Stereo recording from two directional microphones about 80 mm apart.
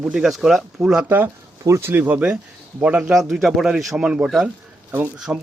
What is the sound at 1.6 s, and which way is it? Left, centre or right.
Speech, right.